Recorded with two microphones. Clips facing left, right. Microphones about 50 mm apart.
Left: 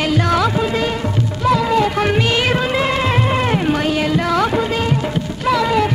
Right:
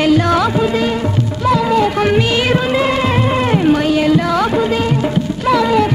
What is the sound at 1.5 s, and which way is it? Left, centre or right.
Music, centre.